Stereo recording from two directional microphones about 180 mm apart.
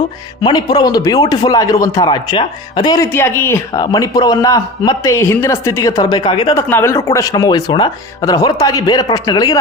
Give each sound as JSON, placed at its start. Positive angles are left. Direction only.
{"t": 0.4, "sound": "speech", "side_deg": 20}
{"t": 6.6, "sound": "speech", "side_deg": 15}